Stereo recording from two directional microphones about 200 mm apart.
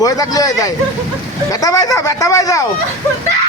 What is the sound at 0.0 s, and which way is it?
Speech, 15° left (ahead or behind).